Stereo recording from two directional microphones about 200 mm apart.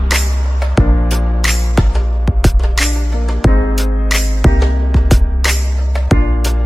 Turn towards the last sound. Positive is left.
turn(degrees=0)  # may be behind; listen again after turning